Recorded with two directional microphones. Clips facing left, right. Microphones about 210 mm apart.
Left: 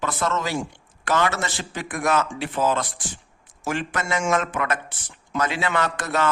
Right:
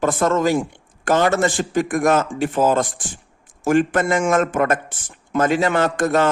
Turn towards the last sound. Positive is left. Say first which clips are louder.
# right 7 dB
turn(degrees=-50)  # may be behind; listen again after turning